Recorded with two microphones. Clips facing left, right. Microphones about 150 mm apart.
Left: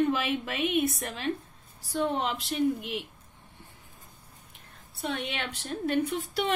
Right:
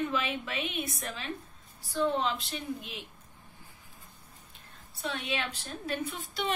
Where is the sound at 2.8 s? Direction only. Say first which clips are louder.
Left 8 dB; 70° left (ahead or behind).